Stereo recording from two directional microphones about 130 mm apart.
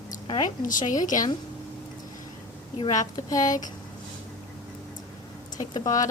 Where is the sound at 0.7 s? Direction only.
90° left.